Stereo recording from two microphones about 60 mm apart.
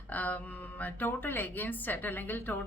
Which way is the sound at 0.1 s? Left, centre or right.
Left.